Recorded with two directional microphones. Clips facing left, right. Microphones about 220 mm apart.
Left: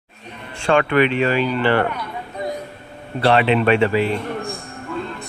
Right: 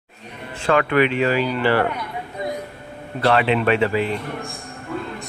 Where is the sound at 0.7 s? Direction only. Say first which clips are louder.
Left 1 dB; 25° left (ahead or behind).